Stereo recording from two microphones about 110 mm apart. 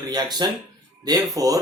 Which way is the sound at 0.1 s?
40° right (ahead or behind).